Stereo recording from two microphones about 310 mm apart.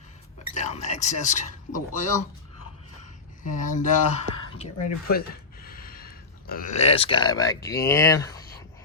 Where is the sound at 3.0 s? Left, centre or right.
Left.